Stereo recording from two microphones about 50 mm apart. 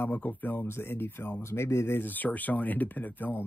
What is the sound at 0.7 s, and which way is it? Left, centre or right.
Speech, left.